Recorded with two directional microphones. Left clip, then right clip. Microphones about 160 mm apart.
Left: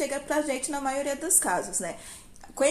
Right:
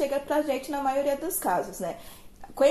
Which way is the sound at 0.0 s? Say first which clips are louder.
Right 2 dB; 15° left (ahead or behind).